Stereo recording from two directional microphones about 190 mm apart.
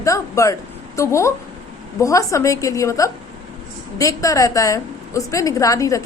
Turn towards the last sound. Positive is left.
turn(degrees=15)  # may be behind; listen again after turning